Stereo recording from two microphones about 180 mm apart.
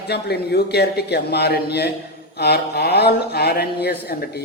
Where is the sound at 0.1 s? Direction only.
65° left (ahead or behind).